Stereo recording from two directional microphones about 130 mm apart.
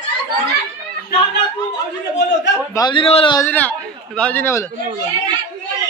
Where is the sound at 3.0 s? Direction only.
50° left (ahead or behind).